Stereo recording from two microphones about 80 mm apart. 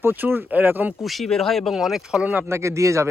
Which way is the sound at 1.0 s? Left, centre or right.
Centre.